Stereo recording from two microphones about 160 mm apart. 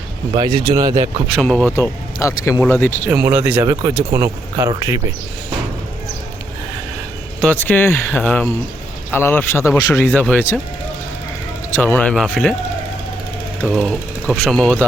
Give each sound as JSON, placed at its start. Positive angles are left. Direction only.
{"t": 0.3, "sound": "speech", "side_deg": -30}
{"t": 1.3, "sound": "speech", "side_deg": 5}
{"t": 1.7, "sound": "a man's voice", "side_deg": 20}
{"t": 3.1, "sound": "speech", "side_deg": -10}
{"t": 3.6, "sound": "speech", "side_deg": -25}
{"t": 7.4, "sound": "a man's voice", "side_deg": 10}
{"t": 11.7, "sound": "speech", "side_deg": 10}
{"t": 13.6, "sound": "speech", "side_deg": 0}